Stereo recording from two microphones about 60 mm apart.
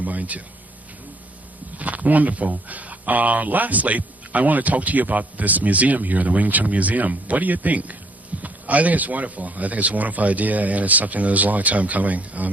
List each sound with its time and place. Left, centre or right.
0.0 s speech: right
1.8 s speech: right